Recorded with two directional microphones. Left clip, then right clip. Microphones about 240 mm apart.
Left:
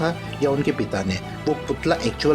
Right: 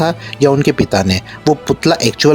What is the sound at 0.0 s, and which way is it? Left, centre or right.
Speech, right.